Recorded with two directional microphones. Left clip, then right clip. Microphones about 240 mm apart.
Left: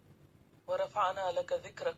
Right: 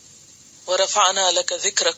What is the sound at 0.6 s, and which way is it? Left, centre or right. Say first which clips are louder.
Speech: right 14 dB; right.